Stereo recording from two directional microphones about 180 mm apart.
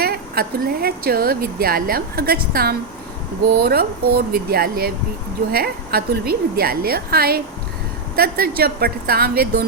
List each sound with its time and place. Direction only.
0.0 s a woman's voice: 60° right (ahead or behind)